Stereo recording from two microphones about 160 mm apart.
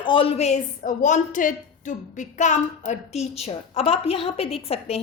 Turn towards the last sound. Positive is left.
turn(degrees=40)  # may be behind; listen again after turning